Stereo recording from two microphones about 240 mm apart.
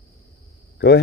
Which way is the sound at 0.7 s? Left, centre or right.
Left.